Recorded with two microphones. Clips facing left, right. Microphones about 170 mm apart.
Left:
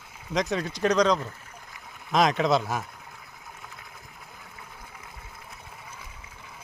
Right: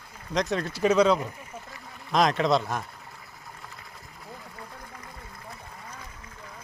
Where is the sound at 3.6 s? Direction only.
Centre (ahead or behind).